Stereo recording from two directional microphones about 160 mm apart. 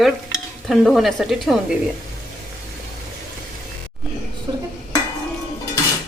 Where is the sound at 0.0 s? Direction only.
Centre (ahead or behind).